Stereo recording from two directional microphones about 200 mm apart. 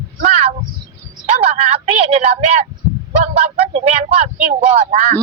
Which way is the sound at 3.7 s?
35° right (ahead or behind).